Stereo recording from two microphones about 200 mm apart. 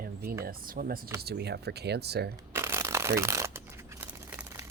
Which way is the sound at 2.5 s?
15° right (ahead or behind).